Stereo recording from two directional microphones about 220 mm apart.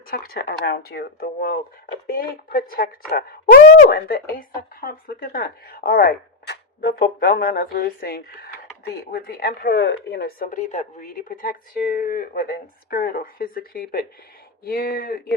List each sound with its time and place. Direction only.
0.1 s a woman's voice: 45° left (ahead or behind)